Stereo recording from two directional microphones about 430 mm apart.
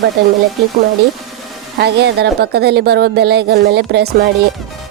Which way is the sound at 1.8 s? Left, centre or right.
Right.